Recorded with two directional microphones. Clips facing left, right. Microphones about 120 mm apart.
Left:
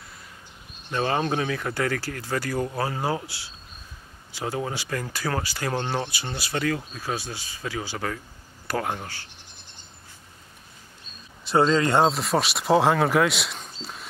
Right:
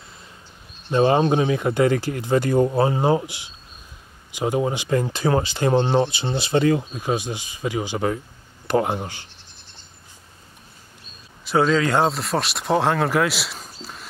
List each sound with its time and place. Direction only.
0.8 s speech: 20° right (ahead or behind)
11.7 s speech: centre (ahead or behind)